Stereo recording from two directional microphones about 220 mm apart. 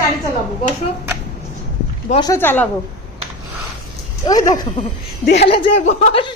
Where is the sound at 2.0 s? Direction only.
20° left (ahead or behind).